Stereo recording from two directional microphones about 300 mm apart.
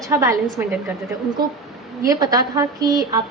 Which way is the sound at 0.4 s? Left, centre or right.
Centre.